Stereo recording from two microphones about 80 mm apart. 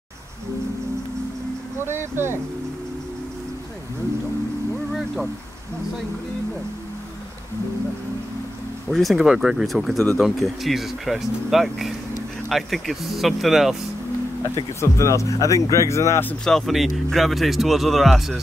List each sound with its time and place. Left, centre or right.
1.8 s speech: right
4.9 s a sound: centre
8.9 s speech: centre
14.4 s speech: left
16.4 s speech: centre